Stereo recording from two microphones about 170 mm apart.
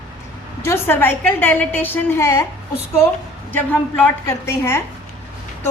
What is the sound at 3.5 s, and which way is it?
A woman's voice, 10° left (ahead or behind).